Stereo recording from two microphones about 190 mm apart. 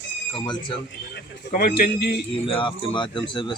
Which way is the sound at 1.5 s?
45° left (ahead or behind).